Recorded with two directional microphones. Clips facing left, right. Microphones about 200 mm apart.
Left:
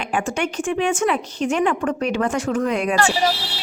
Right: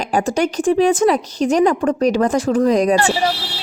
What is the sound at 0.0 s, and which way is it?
Speech, 40° right (ahead or behind).